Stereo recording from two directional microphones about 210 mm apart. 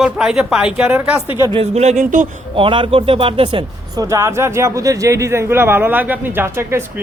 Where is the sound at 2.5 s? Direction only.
25° right (ahead or behind).